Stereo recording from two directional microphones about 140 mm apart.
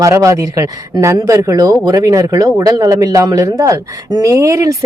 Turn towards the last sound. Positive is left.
turn(degrees=-20)  # may be behind; listen again after turning